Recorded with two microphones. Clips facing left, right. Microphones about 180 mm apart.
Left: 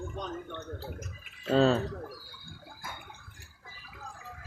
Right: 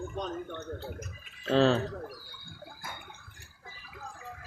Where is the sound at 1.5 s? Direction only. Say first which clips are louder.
Even; 5° left (ahead or behind).